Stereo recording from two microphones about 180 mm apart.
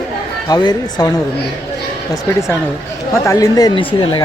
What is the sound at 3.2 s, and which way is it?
Speech, 20° left (ahead or behind).